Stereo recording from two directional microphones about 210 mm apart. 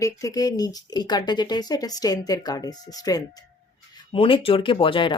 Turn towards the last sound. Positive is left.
turn(degrees=25)  # may be behind; listen again after turning